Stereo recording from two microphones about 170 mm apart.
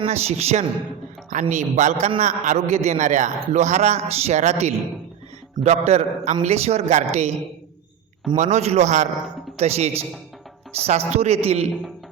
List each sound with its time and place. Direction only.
0.0 s a man's voice: 40° right (ahead or behind)
8.4 s speech: 40° right (ahead or behind)